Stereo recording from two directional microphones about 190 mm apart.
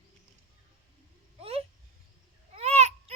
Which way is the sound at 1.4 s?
30° right (ahead or behind).